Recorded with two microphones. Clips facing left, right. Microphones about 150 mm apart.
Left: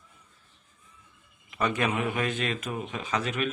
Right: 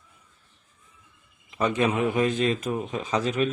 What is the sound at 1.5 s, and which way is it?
A man's voice, 30° right (ahead or behind).